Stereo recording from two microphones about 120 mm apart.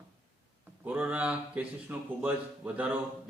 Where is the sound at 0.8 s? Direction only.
10° right (ahead or behind).